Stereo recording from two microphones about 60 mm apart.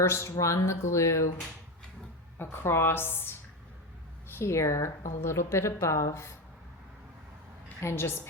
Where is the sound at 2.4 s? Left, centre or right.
Left.